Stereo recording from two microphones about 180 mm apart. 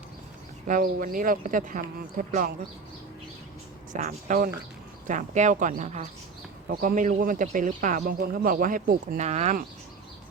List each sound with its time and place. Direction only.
0.7 s speech: 50° right (ahead or behind)
3.9 s speech: 45° right (ahead or behind)